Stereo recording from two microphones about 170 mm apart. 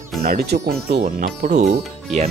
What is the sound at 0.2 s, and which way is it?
Speech, 65° right (ahead or behind).